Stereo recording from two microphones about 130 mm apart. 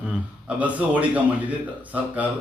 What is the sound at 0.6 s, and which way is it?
Speech, 10° right (ahead or behind).